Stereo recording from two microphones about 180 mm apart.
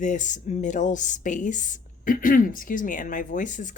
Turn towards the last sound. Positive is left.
turn(degrees=45)  # may be behind; listen again after turning